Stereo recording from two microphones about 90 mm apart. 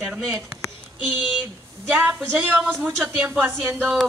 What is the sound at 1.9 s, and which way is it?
Speech, 20° right (ahead or behind).